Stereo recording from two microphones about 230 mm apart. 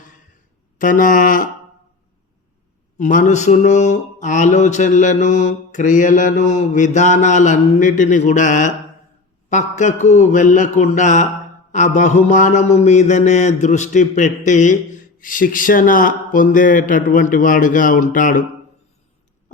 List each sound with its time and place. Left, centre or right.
0.8 s mantra: left
3.0 s mantra: left